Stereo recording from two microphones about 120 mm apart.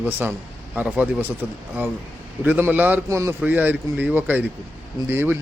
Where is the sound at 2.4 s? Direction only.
15° right (ahead or behind).